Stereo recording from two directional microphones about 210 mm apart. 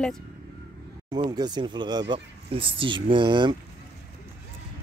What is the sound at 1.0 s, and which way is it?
Speech, 20° right (ahead or behind).